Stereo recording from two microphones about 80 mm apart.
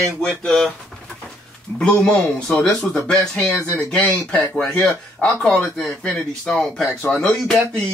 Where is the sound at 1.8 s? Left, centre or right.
Centre.